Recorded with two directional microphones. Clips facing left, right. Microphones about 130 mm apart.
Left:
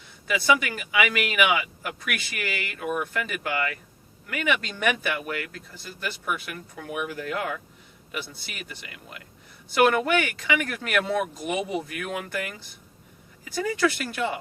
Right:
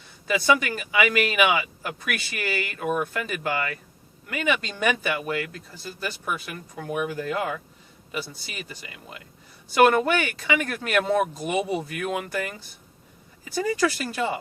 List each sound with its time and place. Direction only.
0.6 s speech: 30° right (ahead or behind)